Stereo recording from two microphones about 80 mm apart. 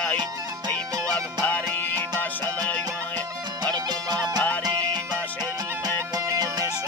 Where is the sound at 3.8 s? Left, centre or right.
Right.